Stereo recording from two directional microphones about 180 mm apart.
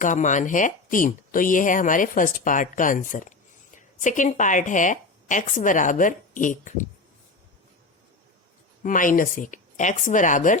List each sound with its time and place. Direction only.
0.0 s a woman's voice: 45° left (ahead or behind)
8.8 s speech: 45° left (ahead or behind)